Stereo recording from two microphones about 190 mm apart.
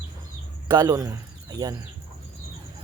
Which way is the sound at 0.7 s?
20° right (ahead or behind).